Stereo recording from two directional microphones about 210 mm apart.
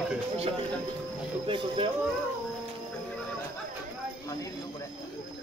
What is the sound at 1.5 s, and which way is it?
Speech, 25° right (ahead or behind).